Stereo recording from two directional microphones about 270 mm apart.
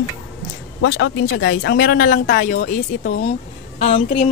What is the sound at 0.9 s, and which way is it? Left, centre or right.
A woman's voice, left.